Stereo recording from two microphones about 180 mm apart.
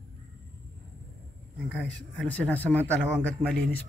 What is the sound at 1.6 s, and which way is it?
A man's voice, 5° left (ahead or behind).